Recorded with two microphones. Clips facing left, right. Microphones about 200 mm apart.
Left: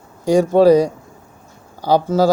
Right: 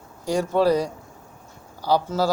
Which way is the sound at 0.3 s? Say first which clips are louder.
Left 8 dB; 45° left (ahead or behind).